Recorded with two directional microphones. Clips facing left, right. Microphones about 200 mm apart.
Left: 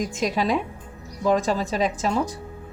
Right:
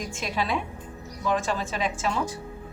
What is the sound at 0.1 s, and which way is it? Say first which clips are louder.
A woman's voice: left 5 dB; 40° left (ahead or behind).